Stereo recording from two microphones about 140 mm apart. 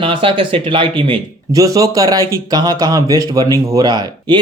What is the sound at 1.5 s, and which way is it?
Speech, 25° right (ahead or behind).